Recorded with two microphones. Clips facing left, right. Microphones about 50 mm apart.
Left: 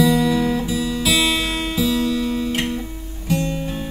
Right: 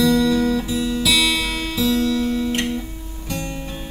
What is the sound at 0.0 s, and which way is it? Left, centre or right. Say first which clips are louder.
Music: even; centre.